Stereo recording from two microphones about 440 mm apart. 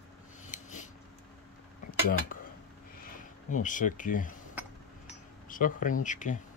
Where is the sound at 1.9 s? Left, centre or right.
Centre.